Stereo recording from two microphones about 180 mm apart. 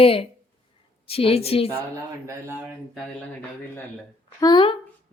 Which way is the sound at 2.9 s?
10° left (ahead or behind).